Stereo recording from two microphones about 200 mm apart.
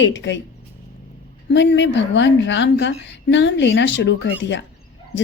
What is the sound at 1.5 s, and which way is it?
A woman's voice, 60° left (ahead or behind).